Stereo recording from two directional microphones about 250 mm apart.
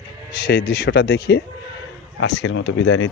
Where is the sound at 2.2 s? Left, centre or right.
Left.